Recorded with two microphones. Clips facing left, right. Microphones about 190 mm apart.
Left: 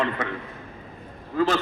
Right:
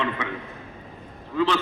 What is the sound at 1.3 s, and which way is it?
Speech, 45° left (ahead or behind).